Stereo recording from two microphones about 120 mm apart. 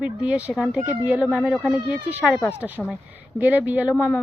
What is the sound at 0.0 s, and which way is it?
A woman's voice, 10° right (ahead or behind).